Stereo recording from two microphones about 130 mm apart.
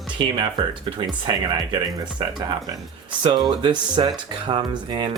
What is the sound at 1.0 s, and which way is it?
Speech, 35° right (ahead or behind).